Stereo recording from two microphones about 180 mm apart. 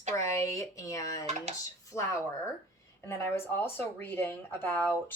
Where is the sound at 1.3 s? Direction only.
40° right (ahead or behind).